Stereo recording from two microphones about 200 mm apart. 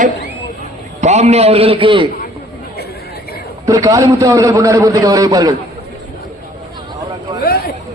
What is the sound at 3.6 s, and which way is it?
A man's voice, 15° right (ahead or behind).